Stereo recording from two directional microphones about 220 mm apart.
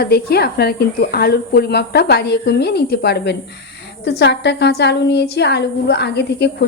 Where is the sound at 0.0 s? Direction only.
45° left (ahead or behind).